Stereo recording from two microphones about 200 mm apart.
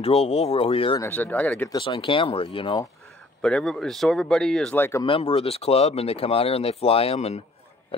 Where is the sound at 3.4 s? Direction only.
5° left (ahead or behind).